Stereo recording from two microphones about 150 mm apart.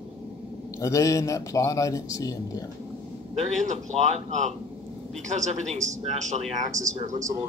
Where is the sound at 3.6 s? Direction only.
50° right (ahead or behind).